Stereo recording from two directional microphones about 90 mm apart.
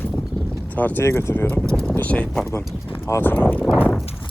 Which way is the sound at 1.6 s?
5° left (ahead or behind).